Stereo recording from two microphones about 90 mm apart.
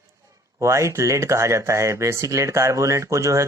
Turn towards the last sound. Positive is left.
turn(degrees=-35)  # may be behind; listen again after turning